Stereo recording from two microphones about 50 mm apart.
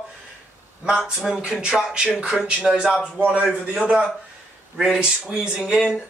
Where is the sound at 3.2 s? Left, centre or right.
Right.